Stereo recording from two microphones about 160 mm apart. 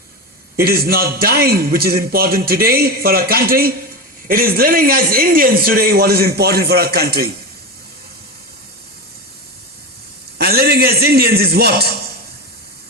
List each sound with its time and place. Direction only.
0.6 s a man's voice: 70° right (ahead or behind)
10.3 s a man's voice: 70° right (ahead or behind)